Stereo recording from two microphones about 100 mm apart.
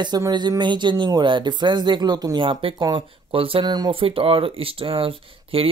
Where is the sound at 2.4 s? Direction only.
65° right (ahead or behind).